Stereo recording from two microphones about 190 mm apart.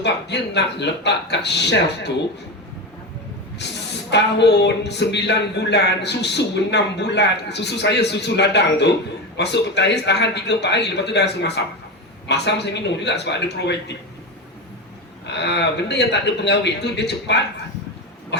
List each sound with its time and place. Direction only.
0.0 s speech: 65° left (ahead or behind)
3.6 s speech: 65° left (ahead or behind)
15.3 s speech: 65° left (ahead or behind)